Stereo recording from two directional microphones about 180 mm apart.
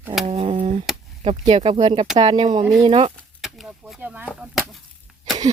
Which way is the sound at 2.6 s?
15° right (ahead or behind).